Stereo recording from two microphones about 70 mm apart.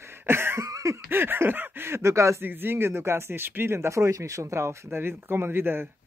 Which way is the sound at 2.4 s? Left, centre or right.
Right.